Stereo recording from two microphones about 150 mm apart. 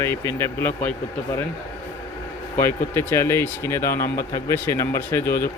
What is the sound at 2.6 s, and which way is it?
Speech, 15° left (ahead or behind).